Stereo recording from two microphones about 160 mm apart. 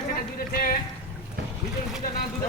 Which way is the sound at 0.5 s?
60° left (ahead or behind).